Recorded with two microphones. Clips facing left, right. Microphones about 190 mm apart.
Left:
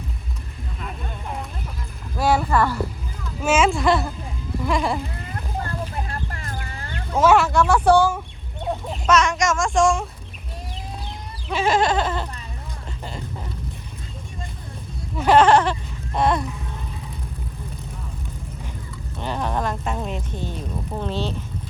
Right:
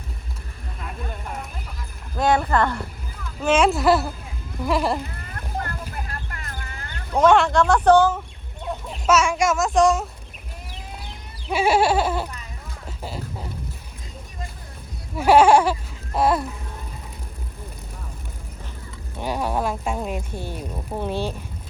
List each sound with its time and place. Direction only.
2.1 s a sound: 5° left (ahead or behind)
3.4 s speech: 5° left (ahead or behind)
6.1 s a sound: 30° left (ahead or behind)
7.2 s speech: 5° left (ahead or behind)
9.0 s speech: 5° right (ahead or behind)
11.4 s speech: 10° right (ahead or behind)
13.0 s a sound: 5° right (ahead or behind)
15.1 s speech: 10° right (ahead or behind)
19.2 s speech: 10° right (ahead or behind)